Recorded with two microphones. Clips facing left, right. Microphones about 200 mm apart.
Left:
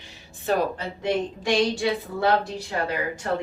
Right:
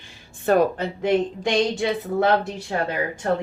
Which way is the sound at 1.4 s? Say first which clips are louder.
Right 1 dB; 20° right (ahead or behind).